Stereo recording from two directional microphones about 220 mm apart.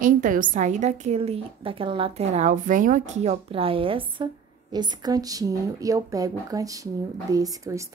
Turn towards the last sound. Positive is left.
turn(degrees=-15)  # may be behind; listen again after turning